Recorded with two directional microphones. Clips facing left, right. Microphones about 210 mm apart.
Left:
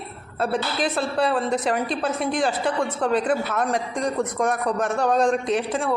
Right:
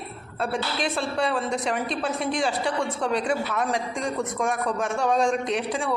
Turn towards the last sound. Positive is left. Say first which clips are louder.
# left 3 dB
turn(degrees=0)  # may be behind; listen again after turning